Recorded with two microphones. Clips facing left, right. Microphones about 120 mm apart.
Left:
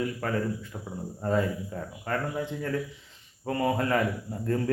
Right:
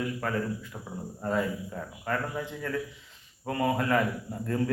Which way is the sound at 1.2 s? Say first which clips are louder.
Left 2 dB; 35° left (ahead or behind).